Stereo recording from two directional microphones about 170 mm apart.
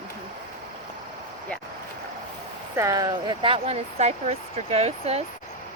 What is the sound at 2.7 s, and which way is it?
Speech, 20° right (ahead or behind).